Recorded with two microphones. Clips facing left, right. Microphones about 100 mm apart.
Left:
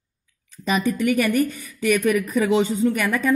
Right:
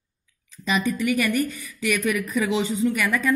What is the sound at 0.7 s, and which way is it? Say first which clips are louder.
A woman's voice: left 2 dB; 45° left (ahead or behind).